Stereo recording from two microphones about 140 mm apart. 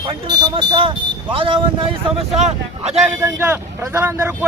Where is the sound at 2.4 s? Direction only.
55° right (ahead or behind).